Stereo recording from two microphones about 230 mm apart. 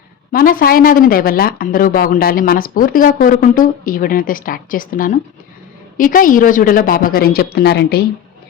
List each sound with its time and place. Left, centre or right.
0.3 s speech: left